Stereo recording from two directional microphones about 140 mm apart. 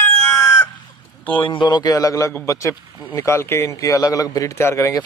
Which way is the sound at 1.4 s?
35° left (ahead or behind).